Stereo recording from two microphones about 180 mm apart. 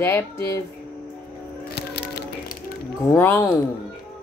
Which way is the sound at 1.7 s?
65° left (ahead or behind).